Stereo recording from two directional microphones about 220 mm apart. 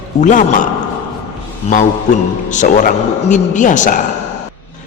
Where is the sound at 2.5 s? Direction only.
35° left (ahead or behind).